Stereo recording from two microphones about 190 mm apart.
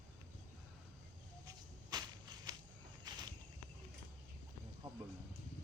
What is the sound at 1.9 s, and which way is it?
Walk, 20° right (ahead or behind).